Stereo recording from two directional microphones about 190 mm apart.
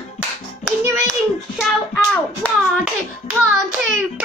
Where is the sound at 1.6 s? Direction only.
5° left (ahead or behind).